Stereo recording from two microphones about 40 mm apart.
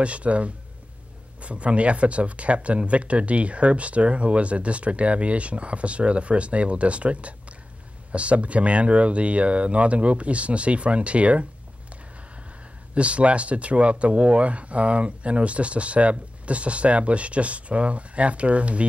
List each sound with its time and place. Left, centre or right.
0.0 s speech: right
12.9 s speech: right